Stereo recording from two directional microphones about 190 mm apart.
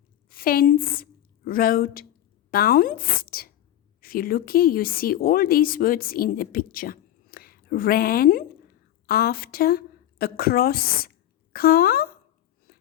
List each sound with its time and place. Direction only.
0.3 s a woman's voice: 50° left (ahead or behind)